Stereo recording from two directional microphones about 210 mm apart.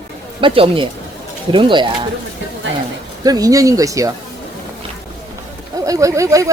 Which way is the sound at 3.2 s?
15° right (ahead or behind).